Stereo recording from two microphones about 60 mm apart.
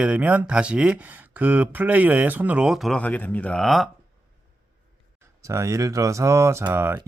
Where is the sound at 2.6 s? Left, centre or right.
Centre.